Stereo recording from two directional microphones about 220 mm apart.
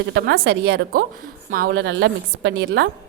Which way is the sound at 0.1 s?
50° right (ahead or behind).